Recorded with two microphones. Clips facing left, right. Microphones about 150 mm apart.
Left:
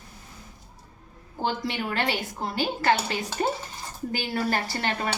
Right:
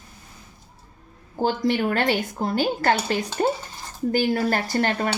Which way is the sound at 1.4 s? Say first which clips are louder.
Right 7 dB; 45° right (ahead or behind).